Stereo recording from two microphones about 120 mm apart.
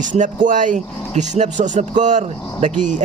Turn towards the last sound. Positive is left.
turn(degrees=-80)